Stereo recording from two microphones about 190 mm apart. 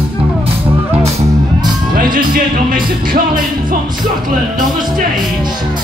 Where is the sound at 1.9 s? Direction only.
50° right (ahead or behind).